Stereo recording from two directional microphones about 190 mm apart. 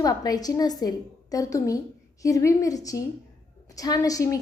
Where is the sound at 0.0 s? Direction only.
20° left (ahead or behind).